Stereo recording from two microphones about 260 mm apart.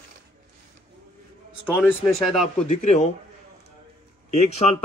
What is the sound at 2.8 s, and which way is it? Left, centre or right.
Speech, left.